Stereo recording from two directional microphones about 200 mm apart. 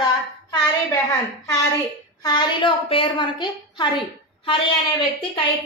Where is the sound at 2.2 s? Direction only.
25° left (ahead or behind).